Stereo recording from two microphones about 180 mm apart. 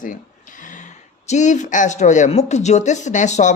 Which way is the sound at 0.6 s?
45° left (ahead or behind).